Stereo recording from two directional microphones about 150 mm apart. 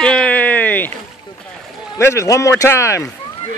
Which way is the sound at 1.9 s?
20° left (ahead or behind).